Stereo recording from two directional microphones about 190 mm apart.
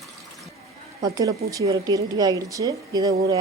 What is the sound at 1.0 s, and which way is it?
Speech, 20° right (ahead or behind).